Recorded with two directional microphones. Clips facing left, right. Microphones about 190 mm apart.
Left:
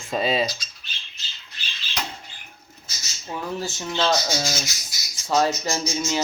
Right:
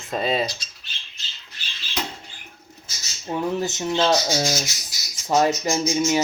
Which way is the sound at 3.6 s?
20° right (ahead or behind).